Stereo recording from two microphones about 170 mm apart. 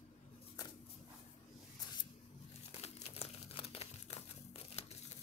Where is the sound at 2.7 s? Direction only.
35° left (ahead or behind).